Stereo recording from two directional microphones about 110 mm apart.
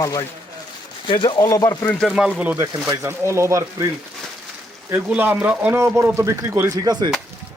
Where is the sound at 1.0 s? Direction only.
50° left (ahead or behind).